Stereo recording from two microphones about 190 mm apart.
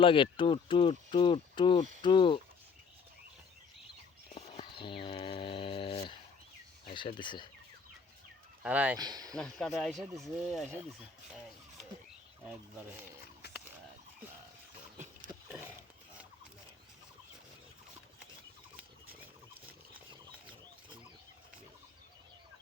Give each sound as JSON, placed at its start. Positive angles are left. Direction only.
{"t": 0.0, "sound": "speech", "side_deg": 25}
{"t": 4.4, "sound": "livestock", "side_deg": 30}
{"t": 6.8, "sound": "speech", "side_deg": 25}
{"t": 8.6, "sound": "speech", "side_deg": -10}
{"t": 9.0, "sound": "speech", "side_deg": -20}
{"t": 9.4, "sound": "speech", "side_deg": 0}
{"t": 12.5, "sound": "speech", "side_deg": -10}
{"t": 14.9, "sound": "a sound", "side_deg": -40}